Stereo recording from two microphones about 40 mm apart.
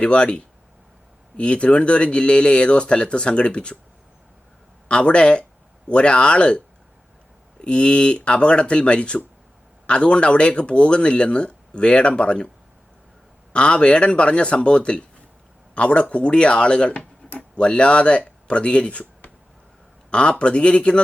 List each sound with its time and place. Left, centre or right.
0.0 s speech: left
4.9 s speech: left
7.6 s speech: left
13.5 s speech: left